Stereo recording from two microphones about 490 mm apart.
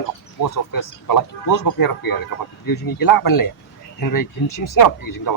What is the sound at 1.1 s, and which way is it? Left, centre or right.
Speech, left.